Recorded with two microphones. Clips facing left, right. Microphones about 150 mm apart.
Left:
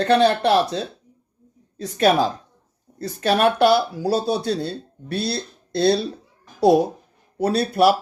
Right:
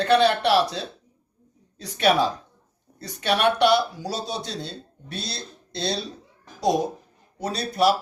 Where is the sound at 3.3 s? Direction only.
45° left (ahead or behind).